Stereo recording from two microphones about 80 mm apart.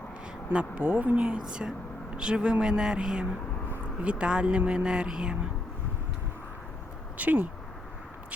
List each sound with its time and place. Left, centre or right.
0.5 s speech: centre
7.2 s speech: right